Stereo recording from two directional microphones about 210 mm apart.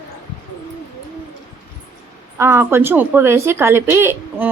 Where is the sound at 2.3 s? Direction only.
10° right (ahead or behind).